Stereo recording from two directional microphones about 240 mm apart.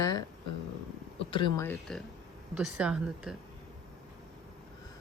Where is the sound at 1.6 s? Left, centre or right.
Centre.